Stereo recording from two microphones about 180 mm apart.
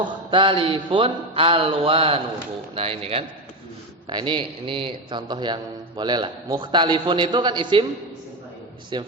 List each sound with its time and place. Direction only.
0.0 s a man's voice: 25° right (ahead or behind)
8.9 s a man's voice: 25° right (ahead or behind)